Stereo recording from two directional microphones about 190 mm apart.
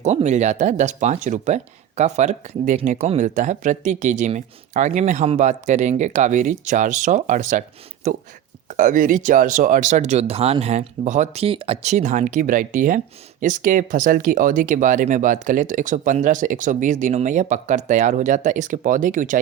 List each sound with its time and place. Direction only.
0.0 s speech: 35° right (ahead or behind)